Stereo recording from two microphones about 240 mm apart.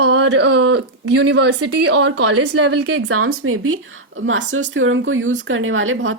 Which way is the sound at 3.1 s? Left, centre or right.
Right.